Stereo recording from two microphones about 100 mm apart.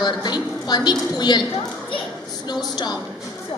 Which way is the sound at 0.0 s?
45° left (ahead or behind).